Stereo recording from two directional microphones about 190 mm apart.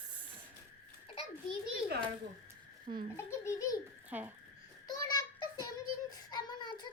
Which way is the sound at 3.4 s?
15° left (ahead or behind).